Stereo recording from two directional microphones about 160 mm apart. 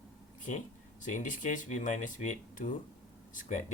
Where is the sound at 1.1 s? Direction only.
55° left (ahead or behind).